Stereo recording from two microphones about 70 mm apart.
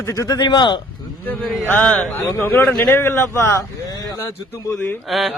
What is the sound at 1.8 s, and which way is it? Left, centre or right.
Speech, centre.